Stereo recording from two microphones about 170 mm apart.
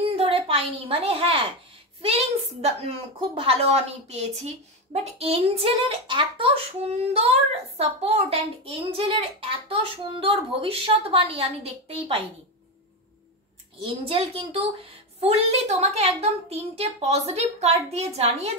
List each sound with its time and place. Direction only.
0.0 s a sound: 35° right (ahead or behind)
2.0 s a woman's voice: 35° right (ahead or behind)
13.8 s a woman's voice: 35° right (ahead or behind)